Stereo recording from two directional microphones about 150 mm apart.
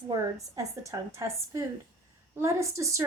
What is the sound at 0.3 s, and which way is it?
A woman's voice, 20° right (ahead or behind).